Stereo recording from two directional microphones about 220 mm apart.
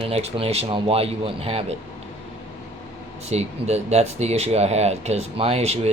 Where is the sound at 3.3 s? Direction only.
30° right (ahead or behind).